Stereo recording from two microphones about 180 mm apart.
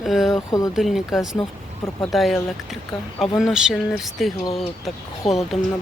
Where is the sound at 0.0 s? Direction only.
Centre (ahead or behind).